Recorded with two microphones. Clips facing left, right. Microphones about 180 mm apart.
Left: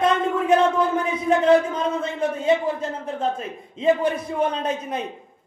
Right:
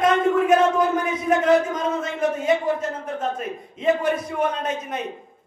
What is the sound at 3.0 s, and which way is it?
A man's voice, 30° left (ahead or behind).